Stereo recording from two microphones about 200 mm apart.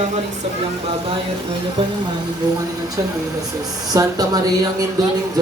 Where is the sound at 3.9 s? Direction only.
15° right (ahead or behind).